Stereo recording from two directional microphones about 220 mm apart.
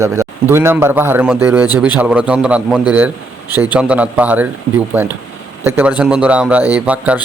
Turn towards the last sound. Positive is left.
turn(degrees=-5)  # may be behind; listen again after turning